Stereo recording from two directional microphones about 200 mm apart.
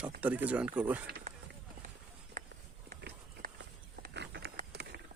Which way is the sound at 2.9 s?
50° right (ahead or behind).